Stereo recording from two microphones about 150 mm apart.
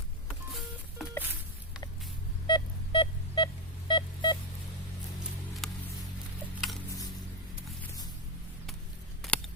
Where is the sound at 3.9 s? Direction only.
30° left (ahead or behind).